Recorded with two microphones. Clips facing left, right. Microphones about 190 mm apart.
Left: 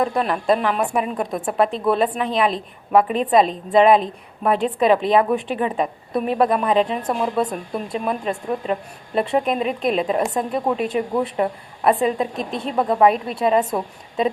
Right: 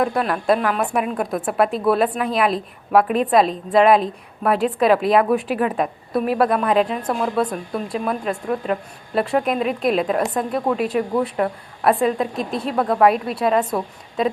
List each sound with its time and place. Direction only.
0.2 s a woman's voice: 5° right (ahead or behind)